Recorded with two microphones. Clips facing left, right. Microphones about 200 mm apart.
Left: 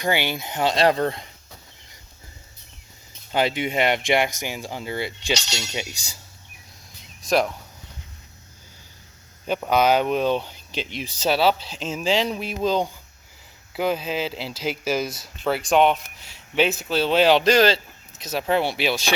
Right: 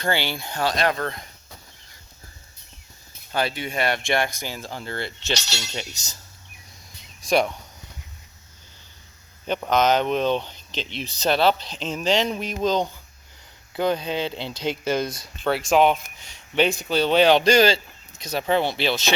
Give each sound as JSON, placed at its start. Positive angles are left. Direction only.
{"t": 0.0, "sound": "speech", "side_deg": 15}
{"t": 3.3, "sound": "speech", "side_deg": 20}
{"t": 7.2, "sound": "speech", "side_deg": 0}
{"t": 9.5, "sound": "speech", "side_deg": 5}